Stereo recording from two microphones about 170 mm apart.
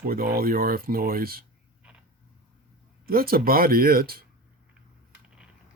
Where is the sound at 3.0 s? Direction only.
60° right (ahead or behind).